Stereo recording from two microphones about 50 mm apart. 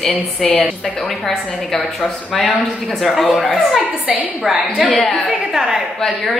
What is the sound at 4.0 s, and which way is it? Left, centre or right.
Speech, right.